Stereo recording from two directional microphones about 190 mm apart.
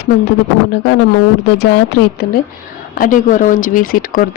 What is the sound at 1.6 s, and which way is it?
Speech, 60° left (ahead or behind).